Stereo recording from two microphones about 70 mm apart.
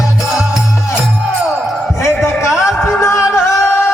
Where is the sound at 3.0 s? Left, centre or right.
Left.